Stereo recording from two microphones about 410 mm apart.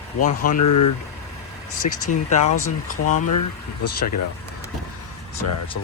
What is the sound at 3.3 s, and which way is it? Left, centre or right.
Speech, left.